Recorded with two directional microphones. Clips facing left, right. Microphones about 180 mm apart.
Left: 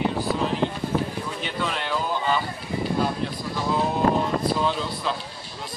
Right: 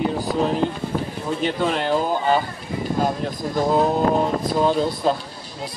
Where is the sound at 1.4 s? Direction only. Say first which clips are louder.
Right 9 dB; 45° right (ahead or behind).